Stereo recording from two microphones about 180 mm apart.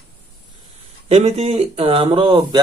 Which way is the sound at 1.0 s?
35° right (ahead or behind).